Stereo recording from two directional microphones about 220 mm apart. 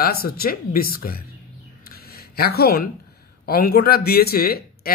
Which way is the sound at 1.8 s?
45° left (ahead or behind).